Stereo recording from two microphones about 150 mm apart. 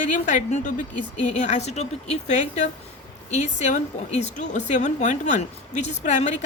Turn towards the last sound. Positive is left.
turn(degrees=55)  # may be behind; listen again after turning